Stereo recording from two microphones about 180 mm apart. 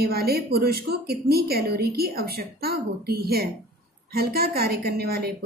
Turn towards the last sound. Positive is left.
turn(degrees=-60)  # may be behind; listen again after turning